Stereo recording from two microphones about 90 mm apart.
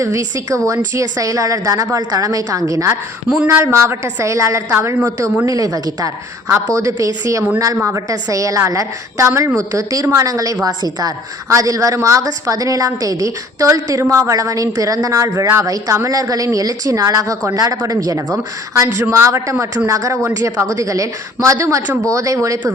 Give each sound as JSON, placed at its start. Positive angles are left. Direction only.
{"t": 0.0, "sound": "speech", "side_deg": -35}